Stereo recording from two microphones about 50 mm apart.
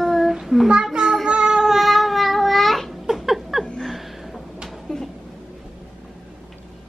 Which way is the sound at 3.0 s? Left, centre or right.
Centre.